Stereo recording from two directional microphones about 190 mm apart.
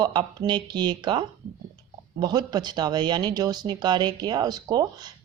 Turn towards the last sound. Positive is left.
turn(degrees=-20)  # may be behind; listen again after turning